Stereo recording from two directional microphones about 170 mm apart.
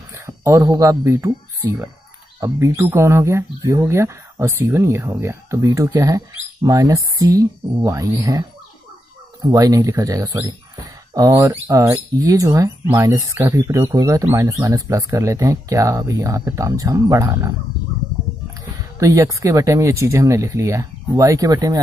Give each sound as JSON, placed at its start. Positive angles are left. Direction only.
{"t": 0.1, "sound": "speech", "side_deg": -15}
{"t": 18.9, "sound": "speech", "side_deg": -20}